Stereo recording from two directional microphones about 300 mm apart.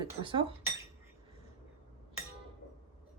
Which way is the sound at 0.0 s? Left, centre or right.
Centre.